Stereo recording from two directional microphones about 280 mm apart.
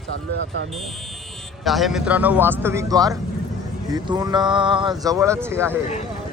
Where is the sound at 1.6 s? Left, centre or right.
Centre.